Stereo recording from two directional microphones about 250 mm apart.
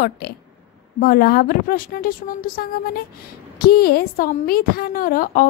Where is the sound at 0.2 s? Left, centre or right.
Left.